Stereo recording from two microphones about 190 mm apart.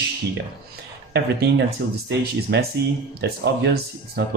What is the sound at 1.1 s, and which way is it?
Speech, 60° right (ahead or behind).